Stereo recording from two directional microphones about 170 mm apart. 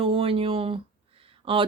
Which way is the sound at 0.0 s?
35° right (ahead or behind).